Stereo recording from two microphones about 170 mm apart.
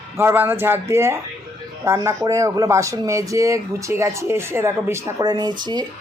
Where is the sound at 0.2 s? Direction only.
15° right (ahead or behind).